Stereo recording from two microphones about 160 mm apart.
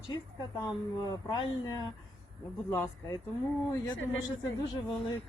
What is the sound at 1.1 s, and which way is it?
Speech, 25° left (ahead or behind).